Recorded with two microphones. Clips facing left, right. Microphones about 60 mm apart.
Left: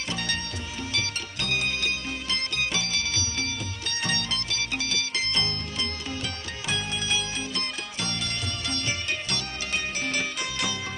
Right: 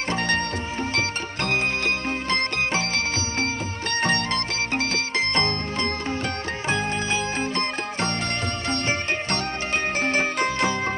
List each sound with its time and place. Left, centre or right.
0.1 s music: right
8.6 s sitar: right
9.9 s music: right